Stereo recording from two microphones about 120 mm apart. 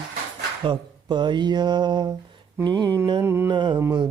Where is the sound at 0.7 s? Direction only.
40° right (ahead or behind).